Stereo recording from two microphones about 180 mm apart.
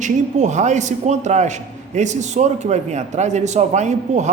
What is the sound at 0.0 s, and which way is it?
A man's voice, 40° right (ahead or behind).